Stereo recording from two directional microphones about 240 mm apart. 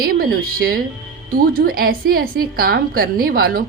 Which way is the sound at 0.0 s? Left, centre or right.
Right.